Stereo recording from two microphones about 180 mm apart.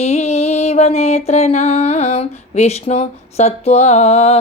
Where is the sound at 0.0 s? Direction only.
35° left (ahead or behind).